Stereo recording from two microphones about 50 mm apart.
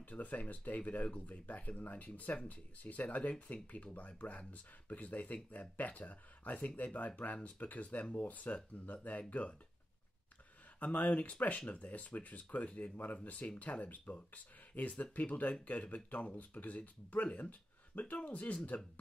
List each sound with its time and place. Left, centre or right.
0.0 s speech: left
10.8 s speech: left